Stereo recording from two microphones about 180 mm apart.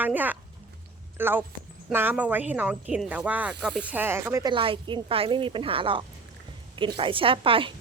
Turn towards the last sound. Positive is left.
turn(degrees=-30)  # may be behind; listen again after turning